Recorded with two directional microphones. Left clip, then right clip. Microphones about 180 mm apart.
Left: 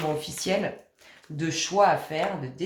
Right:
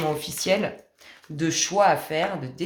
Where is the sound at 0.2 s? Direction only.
35° right (ahead or behind).